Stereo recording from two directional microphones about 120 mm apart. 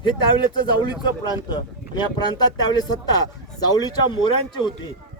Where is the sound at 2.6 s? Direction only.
35° left (ahead or behind).